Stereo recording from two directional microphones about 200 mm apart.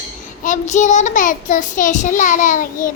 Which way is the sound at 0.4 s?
40° left (ahead or behind).